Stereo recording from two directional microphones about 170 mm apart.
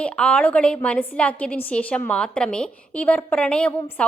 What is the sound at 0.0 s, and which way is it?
A woman's voice, 5° left (ahead or behind).